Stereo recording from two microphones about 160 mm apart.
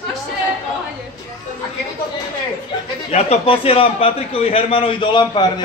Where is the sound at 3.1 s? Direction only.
40° left (ahead or behind).